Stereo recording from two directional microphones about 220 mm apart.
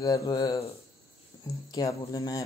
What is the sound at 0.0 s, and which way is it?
Speech, 15° left (ahead or behind).